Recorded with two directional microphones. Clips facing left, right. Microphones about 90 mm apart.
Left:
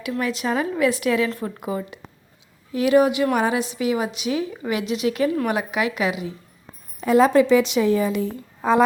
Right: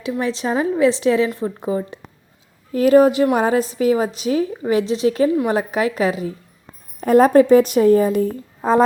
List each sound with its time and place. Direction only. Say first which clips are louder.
0.2 s a woman's voice: right 3 dB; 30° right (ahead or behind); by 8.4 s 50° right (ahead or behind)